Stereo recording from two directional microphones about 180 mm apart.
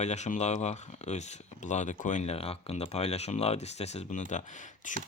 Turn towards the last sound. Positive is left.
turn(degrees=45)  # may be behind; listen again after turning